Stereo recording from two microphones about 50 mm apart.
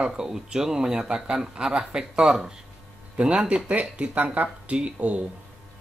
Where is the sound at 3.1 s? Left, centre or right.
Right.